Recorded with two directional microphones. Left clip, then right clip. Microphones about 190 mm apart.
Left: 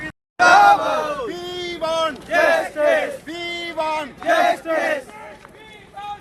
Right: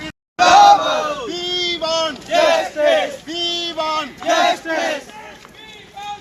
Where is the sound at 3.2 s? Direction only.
15° left (ahead or behind).